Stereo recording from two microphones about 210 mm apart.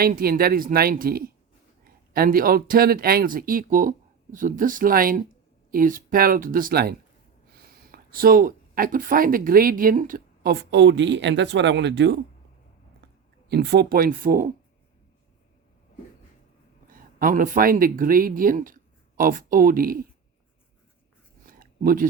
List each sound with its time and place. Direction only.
0.0 s speech: 45° right (ahead or behind)
13.5 s speech: 50° right (ahead or behind)
16.9 s speech: 40° right (ahead or behind)
21.4 s a sound: 40° right (ahead or behind)